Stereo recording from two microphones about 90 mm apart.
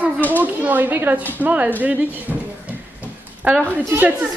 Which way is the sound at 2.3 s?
Centre (ahead or behind).